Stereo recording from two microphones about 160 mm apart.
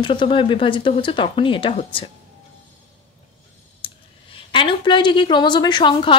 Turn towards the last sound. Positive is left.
turn(degrees=30)  # may be behind; listen again after turning